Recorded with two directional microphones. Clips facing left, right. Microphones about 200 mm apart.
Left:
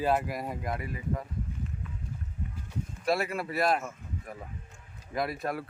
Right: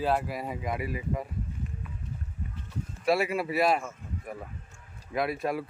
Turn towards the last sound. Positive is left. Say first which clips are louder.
# right 3 dB
turn(degrees=-5)  # may be behind; listen again after turning